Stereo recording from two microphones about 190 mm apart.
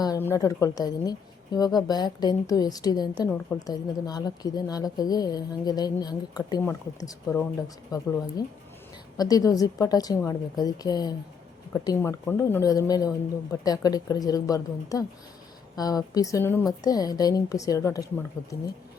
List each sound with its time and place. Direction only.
0.0 s a woman's voice: 15° left (ahead or behind)
3.2 s a woman's voice: 10° left (ahead or behind)
3.7 s a woman's voice: 20° left (ahead or behind)